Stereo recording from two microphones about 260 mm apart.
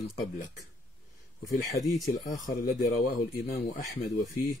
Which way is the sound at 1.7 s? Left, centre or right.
Centre.